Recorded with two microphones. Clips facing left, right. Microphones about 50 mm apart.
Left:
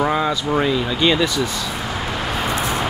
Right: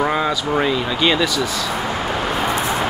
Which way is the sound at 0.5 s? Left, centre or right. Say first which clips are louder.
Even; centre.